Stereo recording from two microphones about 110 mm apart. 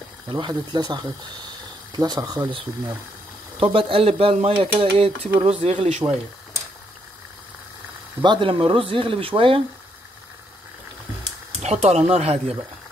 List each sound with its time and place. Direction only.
0.3 s speech: 45° right (ahead or behind)
3.5 s speech: 60° right (ahead or behind); by 6.0 s 85° right
8.2 s speech: 45° right (ahead or behind)
11.6 s speech: 90° right; by 12.5 s 70° right (ahead or behind)